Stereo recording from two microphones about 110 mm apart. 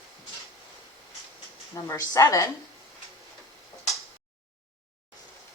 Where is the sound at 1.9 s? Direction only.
25° left (ahead or behind).